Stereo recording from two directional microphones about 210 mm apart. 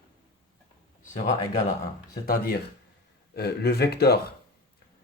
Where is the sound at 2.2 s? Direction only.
45° left (ahead or behind).